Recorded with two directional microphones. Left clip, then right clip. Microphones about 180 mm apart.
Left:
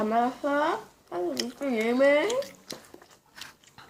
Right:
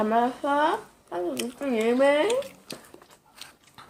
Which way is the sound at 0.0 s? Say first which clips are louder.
Right 2 dB; 10° right (ahead or behind).